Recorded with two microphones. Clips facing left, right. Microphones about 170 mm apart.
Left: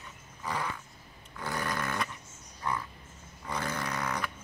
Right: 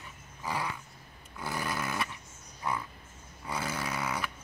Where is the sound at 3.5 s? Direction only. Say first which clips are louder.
Even; 5° right (ahead or behind).